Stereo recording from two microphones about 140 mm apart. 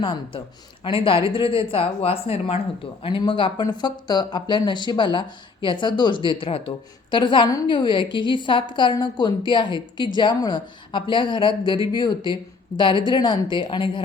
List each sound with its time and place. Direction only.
0.0 s a woman's voice: 35° left (ahead or behind)